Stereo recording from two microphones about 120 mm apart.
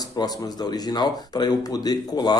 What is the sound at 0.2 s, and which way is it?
Speech, 35° left (ahead or behind).